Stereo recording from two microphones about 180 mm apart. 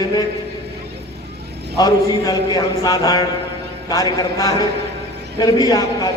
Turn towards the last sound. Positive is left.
turn(degrees=20)  # may be behind; listen again after turning